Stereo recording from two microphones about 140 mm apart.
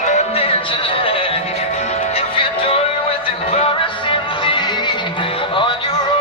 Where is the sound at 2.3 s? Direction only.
40° left (ahead or behind).